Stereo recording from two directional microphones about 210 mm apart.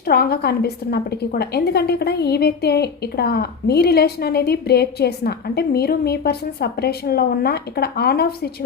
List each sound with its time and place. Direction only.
0.1 s a woman's voice: 50° left (ahead or behind)